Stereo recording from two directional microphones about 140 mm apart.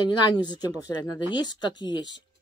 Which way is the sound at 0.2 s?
30° left (ahead or behind).